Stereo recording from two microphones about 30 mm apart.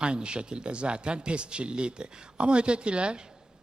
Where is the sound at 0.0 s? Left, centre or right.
Right.